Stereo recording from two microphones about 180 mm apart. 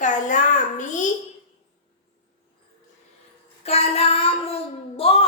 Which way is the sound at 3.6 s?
35° left (ahead or behind).